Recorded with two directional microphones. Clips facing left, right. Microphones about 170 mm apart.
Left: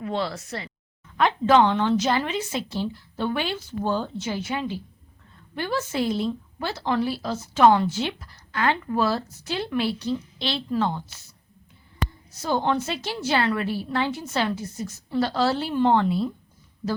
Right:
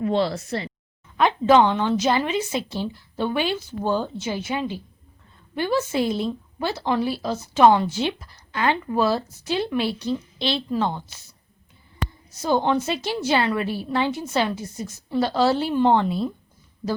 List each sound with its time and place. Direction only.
0.0 s speech: 30° right (ahead or behind)
1.0 s a woman's voice: 15° right (ahead or behind)
12.4 s a woman's voice: 15° right (ahead or behind)